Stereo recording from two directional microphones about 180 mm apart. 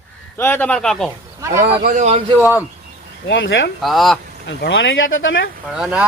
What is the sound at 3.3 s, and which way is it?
Speech, 90° left.